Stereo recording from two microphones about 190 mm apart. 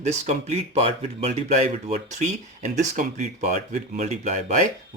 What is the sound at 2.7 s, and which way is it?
Speech, 40° right (ahead or behind).